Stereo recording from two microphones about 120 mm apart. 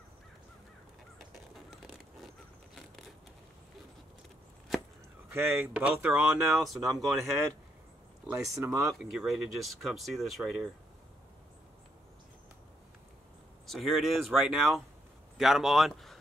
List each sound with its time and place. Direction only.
1.3 s a sound: centre (ahead or behind)
5.3 s speech: 20° right (ahead or behind)
6.7 s speech: centre (ahead or behind)
8.3 s speech: 25° right (ahead or behind)
9.1 s speech: 5° right (ahead or behind)
13.7 s speech: centre (ahead or behind)